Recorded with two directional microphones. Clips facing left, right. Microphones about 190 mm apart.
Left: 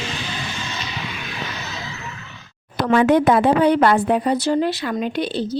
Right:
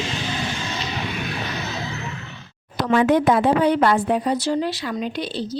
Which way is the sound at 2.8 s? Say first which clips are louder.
Left 2 dB; 60° left (ahead or behind).